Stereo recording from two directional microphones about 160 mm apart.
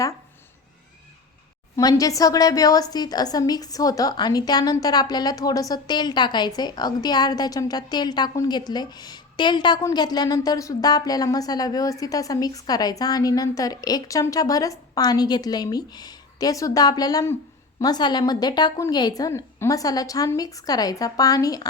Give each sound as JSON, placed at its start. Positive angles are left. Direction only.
{"t": 1.7, "sound": "a woman's voice", "side_deg": 20}